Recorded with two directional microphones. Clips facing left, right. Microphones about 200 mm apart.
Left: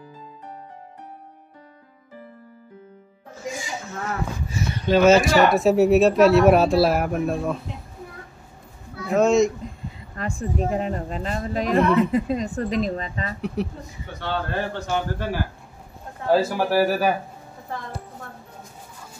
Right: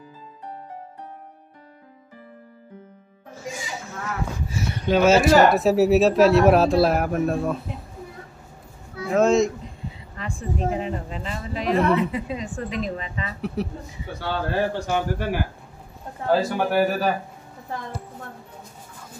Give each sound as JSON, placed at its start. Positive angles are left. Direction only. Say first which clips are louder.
{"t": 4.8, "sound": "speech", "louder": "left 1 dB", "side_deg": -5}
{"t": 9.1, "sound": "speech", "louder": "left 1 dB", "side_deg": 0}
{"t": 10.1, "sound": "speech", "louder": "left 3 dB", "side_deg": 45}
{"t": 11.8, "sound": "speech", "louder": "left 2 dB", "side_deg": 0}
{"t": 12.1, "sound": "speech", "louder": "left 6 dB", "side_deg": 45}
{"t": 13.6, "sound": "a man's voice", "louder": "left 1 dB", "side_deg": 0}
{"t": 16.3, "sound": "speech", "louder": "left 1 dB", "side_deg": 5}